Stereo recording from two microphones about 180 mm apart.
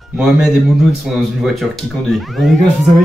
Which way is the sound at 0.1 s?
5° right (ahead or behind).